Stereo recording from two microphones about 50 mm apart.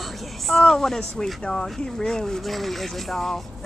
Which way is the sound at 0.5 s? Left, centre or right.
Centre.